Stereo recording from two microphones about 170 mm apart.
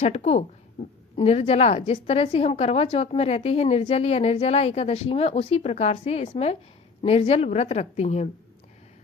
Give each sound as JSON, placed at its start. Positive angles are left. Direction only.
{"t": 0.0, "sound": "a woman's voice", "side_deg": 40}